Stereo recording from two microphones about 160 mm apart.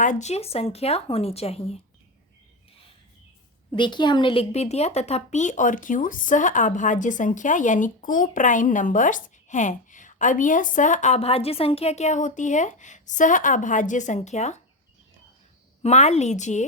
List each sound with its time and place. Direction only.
0.0 s speech: 50° left (ahead or behind)
3.7 s speech: 30° left (ahead or behind); by 14.6 s 45° left (ahead or behind)
15.8 s speech: 45° left (ahead or behind)